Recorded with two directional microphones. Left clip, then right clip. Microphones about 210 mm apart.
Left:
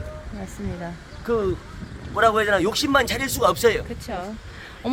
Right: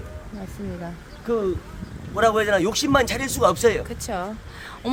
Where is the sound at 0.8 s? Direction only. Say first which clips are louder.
Left 1 dB; 5° right (ahead or behind).